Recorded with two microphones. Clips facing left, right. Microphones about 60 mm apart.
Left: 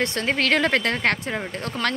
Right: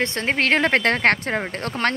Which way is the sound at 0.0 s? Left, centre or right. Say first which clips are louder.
Right 1 dB; right.